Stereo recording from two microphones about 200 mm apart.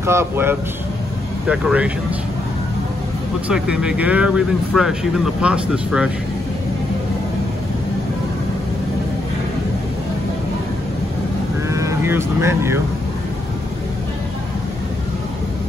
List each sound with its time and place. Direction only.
0.0 s speech: 10° right (ahead or behind)
3.4 s speech: 5° right (ahead or behind)
11.7 s speech: 15° right (ahead or behind)